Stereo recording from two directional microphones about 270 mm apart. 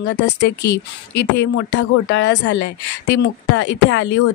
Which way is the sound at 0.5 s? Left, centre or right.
Left.